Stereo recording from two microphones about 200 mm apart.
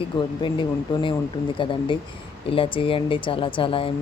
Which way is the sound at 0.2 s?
25° left (ahead or behind).